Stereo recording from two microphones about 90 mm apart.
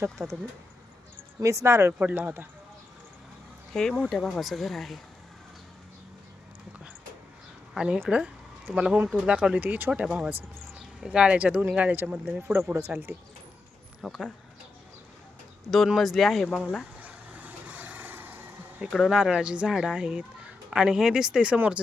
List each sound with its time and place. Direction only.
0.2 s speech: centre (ahead or behind)
1.4 s speech: 35° right (ahead or behind)
1.9 s speech: 20° right (ahead or behind)
3.7 s speech: 5° left (ahead or behind)
7.7 s speech: 5° right (ahead or behind)
9.9 s speech: 10° right (ahead or behind); by 13.1 s 30° right (ahead or behind)
14.0 s speech: centre (ahead or behind)
16.0 s speech: centre (ahead or behind)
17.0 s vehicle: 15° right (ahead or behind)
18.9 s speech: 5° left (ahead or behind)
19.1 s speech: 10° right (ahead or behind)